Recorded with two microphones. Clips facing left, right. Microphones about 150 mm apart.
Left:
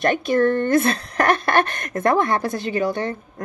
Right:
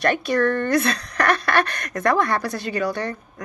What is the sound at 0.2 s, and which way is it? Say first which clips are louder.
Speech: left 2 dB; 45° left (ahead or behind).